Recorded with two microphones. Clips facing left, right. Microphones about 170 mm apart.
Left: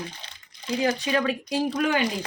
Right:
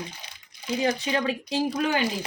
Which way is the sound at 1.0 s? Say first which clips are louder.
Left 2 dB; 25° right (ahead or behind).